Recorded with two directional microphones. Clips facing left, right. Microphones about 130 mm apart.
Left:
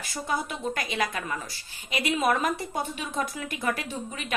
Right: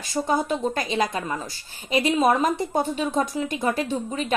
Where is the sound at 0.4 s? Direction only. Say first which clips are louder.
Right 7 dB; 30° right (ahead or behind).